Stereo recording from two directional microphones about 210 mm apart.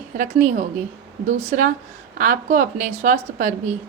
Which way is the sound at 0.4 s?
35° right (ahead or behind).